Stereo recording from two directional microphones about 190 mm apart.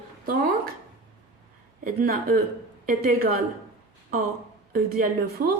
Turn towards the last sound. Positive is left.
turn(degrees=-55)  # may be behind; listen again after turning